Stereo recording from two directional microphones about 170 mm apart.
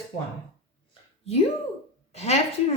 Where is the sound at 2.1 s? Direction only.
40° left (ahead or behind).